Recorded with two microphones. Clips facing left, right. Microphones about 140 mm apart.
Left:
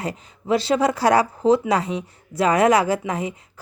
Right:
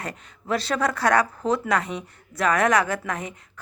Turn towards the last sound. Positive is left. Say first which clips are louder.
# left 5 dB
turn(degrees=30)  # may be behind; listen again after turning